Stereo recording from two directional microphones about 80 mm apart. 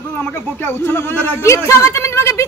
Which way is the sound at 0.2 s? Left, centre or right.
Left.